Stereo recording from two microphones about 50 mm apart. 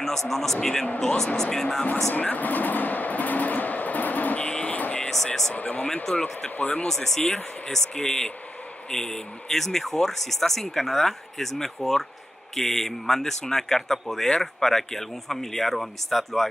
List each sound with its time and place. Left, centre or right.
0.3 s speech: centre
2.1 s train: left
4.5 s vehicle: left
4.7 s vehicle: left
5.1 s speech: centre
5.5 s speech: left
6.1 s speech: centre
6.6 s speech: left
6.9 s speech: centre